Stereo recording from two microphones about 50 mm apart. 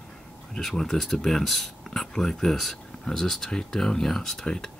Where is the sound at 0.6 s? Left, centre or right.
Centre.